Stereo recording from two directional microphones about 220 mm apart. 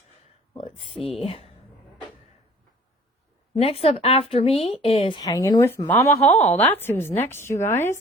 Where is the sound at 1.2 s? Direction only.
25° left (ahead or behind).